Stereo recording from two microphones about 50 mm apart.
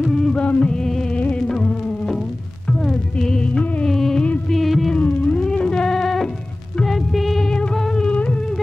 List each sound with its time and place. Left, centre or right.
0.0 s music: centre
0.3 s music: left
1.1 s music: left
1.5 s music: centre
3.9 s music: centre
4.9 s theremin: left
5.4 s a sound: centre
6.8 s music: centre
7.4 s music: centre
8.1 s music: left